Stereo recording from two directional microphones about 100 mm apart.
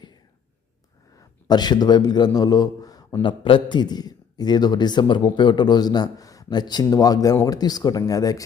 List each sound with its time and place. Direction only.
1.1 s a man's voice: 45° left (ahead or behind)